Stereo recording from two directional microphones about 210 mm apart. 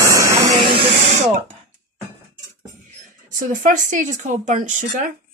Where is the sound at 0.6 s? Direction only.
25° right (ahead or behind).